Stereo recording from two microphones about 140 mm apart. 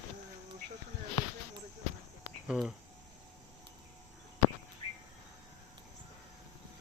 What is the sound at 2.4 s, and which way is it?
Speech, 5° right (ahead or behind).